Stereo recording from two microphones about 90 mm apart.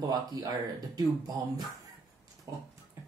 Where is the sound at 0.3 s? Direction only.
45° right (ahead or behind).